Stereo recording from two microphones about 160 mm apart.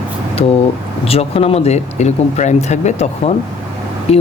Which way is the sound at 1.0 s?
40° left (ahead or behind).